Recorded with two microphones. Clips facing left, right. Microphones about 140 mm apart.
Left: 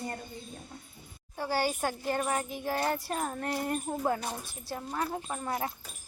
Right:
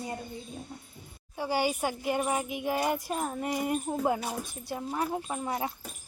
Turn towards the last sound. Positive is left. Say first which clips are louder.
# right 1 dB
turn(degrees=-5)  # may be behind; listen again after turning